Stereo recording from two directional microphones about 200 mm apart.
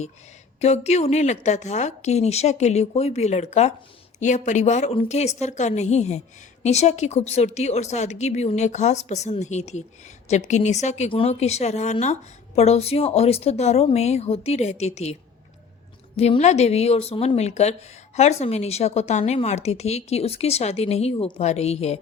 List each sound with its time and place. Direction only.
0.6 s a woman's voice: 35° left (ahead or behind)
16.1 s a woman's voice: 30° left (ahead or behind)